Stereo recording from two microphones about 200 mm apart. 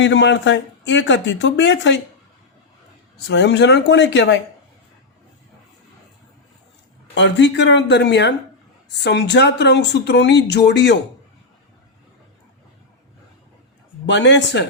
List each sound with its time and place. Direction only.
0.0 s speech: 65° left (ahead or behind)
3.2 s speech: 60° left (ahead or behind)
7.1 s speech: 65° left (ahead or behind)
14.1 s speech: 65° left (ahead or behind)